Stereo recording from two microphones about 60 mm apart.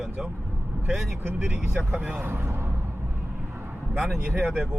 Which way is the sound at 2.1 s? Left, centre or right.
Right.